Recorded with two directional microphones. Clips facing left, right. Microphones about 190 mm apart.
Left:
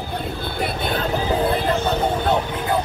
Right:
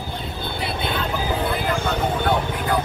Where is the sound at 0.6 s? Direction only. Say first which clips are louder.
Left 3 dB; 45° left (ahead or behind).